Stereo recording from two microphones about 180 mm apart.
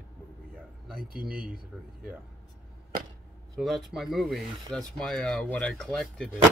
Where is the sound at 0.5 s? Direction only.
5° left (ahead or behind).